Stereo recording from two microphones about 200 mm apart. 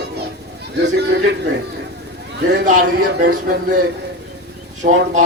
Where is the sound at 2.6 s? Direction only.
45° right (ahead or behind).